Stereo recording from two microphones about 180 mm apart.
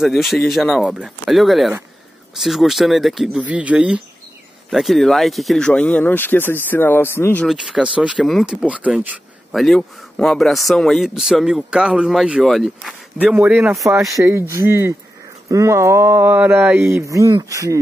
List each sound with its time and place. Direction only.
0.0 s speech: centre (ahead or behind)
7.4 s speech: 5° right (ahead or behind)
13.3 s a sound: 10° right (ahead or behind)